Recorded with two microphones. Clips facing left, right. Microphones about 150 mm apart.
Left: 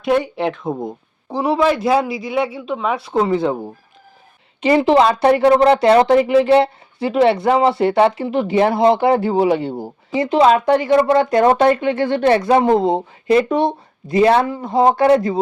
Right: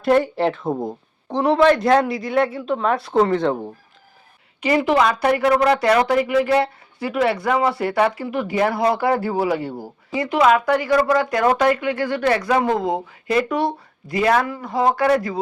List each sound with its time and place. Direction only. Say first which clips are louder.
0.0 s speech: right 1 dB; centre (ahead or behind)
4.6 s speech: left 4 dB; 25° left (ahead or behind)